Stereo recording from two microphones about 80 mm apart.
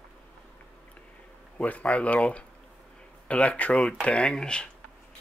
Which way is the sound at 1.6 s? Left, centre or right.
Centre.